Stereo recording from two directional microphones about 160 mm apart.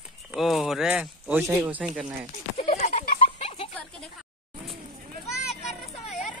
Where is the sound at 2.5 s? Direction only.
45° left (ahead or behind).